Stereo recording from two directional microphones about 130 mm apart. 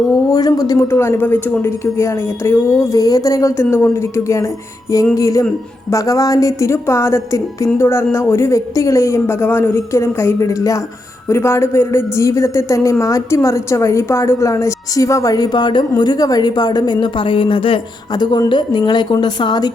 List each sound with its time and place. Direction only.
0.3 s a woman's voice: 30° left (ahead or behind)